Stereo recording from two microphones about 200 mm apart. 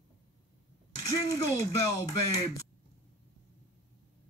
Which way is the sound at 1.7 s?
15° left (ahead or behind).